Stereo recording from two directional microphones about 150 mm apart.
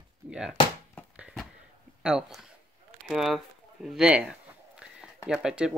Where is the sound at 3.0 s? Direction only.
Centre (ahead or behind).